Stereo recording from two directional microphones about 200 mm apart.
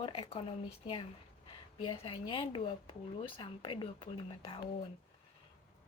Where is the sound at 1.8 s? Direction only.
30° left (ahead or behind).